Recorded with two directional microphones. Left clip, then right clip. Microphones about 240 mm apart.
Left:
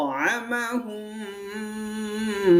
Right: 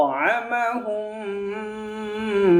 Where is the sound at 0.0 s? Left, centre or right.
Left.